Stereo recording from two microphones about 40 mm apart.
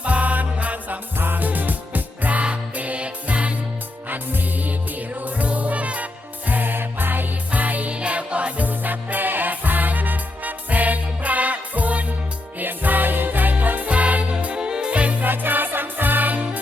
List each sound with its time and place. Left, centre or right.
0.0 s music: right
1.2 s music: right
4.1 s music: right
6.5 s music: right
15.2 s music: right